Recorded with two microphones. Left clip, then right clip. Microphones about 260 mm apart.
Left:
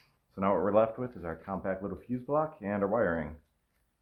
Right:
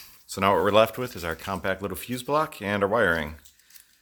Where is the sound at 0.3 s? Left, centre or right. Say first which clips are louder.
Right 7 dB; right.